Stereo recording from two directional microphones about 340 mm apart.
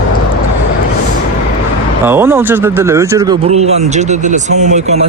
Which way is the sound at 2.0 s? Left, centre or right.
Centre.